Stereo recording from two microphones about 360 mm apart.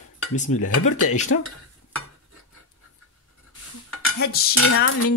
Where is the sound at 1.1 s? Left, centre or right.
Centre.